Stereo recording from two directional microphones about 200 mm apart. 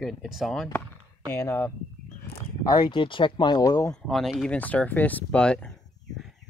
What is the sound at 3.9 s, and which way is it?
Speech, centre (ahead or behind).